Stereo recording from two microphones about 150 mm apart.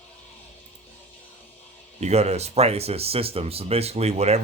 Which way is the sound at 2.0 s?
45° right (ahead or behind).